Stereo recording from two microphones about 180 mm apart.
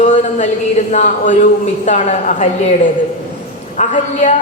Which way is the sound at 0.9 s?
40° left (ahead or behind).